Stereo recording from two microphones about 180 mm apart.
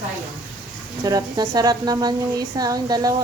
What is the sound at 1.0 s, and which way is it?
A woman's voice, 20° right (ahead or behind).